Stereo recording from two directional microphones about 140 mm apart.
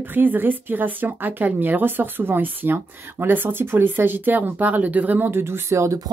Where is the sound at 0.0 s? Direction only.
15° right (ahead or behind).